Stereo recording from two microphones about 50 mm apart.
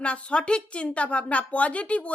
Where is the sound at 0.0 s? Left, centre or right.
Left.